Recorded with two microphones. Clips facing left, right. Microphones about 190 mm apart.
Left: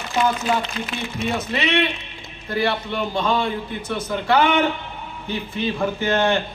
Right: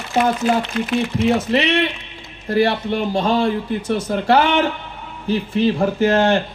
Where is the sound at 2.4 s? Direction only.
35° right (ahead or behind).